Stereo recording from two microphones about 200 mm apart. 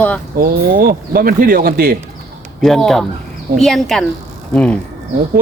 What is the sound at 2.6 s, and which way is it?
A woman's voice, centre (ahead or behind).